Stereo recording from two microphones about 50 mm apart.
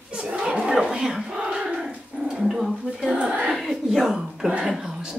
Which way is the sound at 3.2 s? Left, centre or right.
Right.